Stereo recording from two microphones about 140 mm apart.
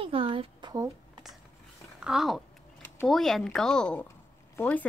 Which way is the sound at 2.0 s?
5° right (ahead or behind).